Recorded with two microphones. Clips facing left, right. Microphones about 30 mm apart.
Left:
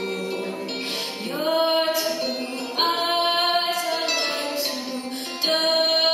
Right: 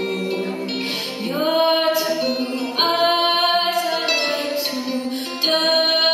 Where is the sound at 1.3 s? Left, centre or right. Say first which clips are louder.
Right 3 dB; right.